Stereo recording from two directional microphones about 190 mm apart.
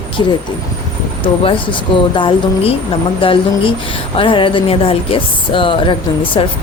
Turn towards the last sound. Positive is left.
turn(degrees=25)  # may be behind; listen again after turning